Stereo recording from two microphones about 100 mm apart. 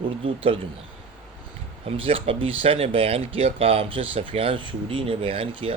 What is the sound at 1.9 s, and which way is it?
Speech, 70° right (ahead or behind).